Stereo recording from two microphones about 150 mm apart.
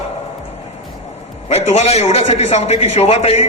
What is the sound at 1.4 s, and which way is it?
A man's voice, 45° left (ahead or behind).